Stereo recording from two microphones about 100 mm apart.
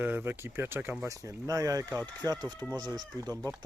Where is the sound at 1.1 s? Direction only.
35° right (ahead or behind).